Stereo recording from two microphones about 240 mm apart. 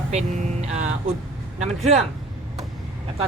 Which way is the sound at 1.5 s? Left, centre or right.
Right.